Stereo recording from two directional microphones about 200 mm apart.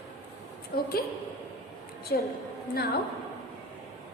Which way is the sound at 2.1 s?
55° left (ahead or behind).